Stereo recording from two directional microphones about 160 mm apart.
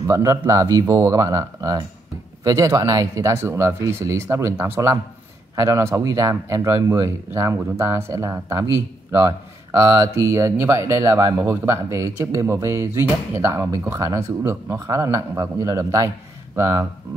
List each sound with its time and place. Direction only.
0.0 s speech: 20° right (ahead or behind)